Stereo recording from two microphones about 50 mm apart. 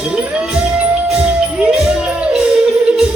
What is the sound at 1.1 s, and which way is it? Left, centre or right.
Music, centre.